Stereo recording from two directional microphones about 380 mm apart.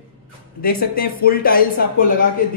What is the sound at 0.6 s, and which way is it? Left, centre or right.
A man's voice, left.